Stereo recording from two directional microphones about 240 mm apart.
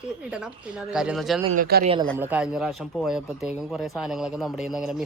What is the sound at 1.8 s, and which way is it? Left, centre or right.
Speech, right.